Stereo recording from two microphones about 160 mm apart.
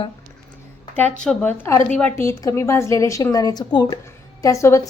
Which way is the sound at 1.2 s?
5° left (ahead or behind).